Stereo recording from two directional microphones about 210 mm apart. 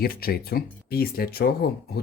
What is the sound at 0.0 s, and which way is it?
Speech, 45° left (ahead or behind).